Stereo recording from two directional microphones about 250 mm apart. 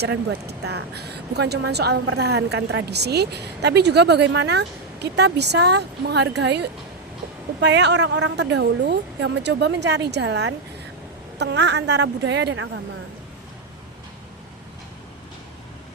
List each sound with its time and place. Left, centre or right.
0.0 s speech: right